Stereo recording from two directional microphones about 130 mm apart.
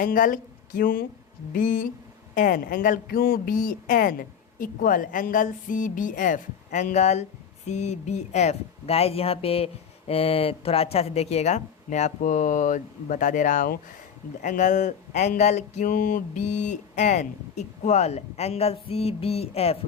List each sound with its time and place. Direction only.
0.0 s a woman's voice: 90° left
14.4 s speech: 75° left (ahead or behind); by 19.7 s 50° left (ahead or behind)